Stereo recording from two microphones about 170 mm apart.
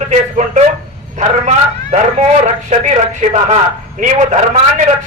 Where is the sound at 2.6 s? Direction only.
40° right (ahead or behind).